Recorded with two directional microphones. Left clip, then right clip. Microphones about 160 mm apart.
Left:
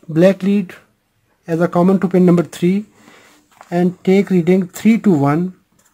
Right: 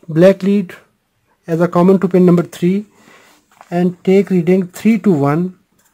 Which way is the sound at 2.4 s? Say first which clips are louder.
Right 1 dB; 15° right (ahead or behind).